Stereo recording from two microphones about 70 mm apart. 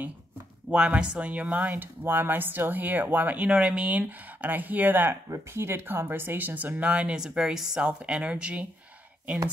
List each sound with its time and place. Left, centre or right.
0.7 s speech: centre
5.3 s speech: right; by 8.6 s centre